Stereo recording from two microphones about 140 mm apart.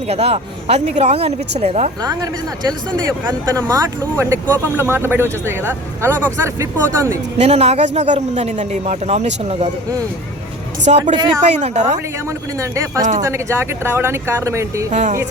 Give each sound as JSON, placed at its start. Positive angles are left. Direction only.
{"t": 0.1, "sound": "a man's voice", "side_deg": -45}
{"t": 2.0, "sound": "speech", "side_deg": -25}
{"t": 7.3, "sound": "a man's voice", "side_deg": -50}
{"t": 10.9, "sound": "a man's voice", "side_deg": -50}
{"t": 12.5, "sound": "speech", "side_deg": -20}
{"t": 14.8, "sound": "speech", "side_deg": -60}